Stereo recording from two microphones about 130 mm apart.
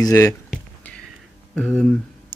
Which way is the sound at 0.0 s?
25° left (ahead or behind).